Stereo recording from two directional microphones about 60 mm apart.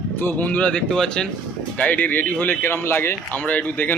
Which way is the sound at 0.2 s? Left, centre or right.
Left.